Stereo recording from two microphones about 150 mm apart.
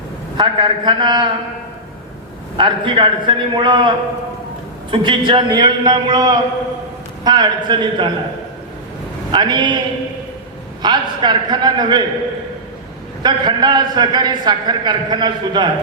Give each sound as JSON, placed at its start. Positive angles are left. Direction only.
{"t": 0.3, "sound": "a man's voice", "side_deg": -30}
{"t": 2.6, "sound": "a man's voice", "side_deg": -35}
{"t": 9.3, "sound": "a man's voice", "side_deg": -30}
{"t": 10.8, "sound": "a man's voice", "side_deg": -30}
{"t": 13.2, "sound": "a man's voice", "side_deg": -30}